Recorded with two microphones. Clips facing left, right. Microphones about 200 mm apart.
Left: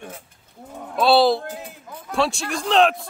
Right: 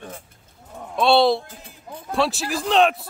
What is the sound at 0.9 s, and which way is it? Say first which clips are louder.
Speech: left 1 dB; centre (ahead or behind).